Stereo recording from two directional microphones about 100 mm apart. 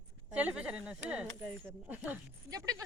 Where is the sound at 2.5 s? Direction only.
35° right (ahead or behind).